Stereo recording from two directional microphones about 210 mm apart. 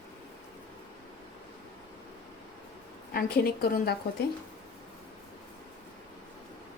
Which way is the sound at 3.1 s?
45° left (ahead or behind).